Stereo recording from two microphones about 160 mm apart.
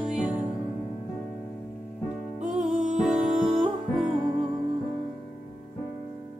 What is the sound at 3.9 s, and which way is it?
Music, centre (ahead or behind).